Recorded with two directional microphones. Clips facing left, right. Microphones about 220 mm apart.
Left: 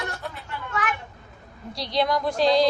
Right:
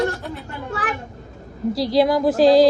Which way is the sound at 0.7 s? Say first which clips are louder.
Right 2 dB; 35° right (ahead or behind).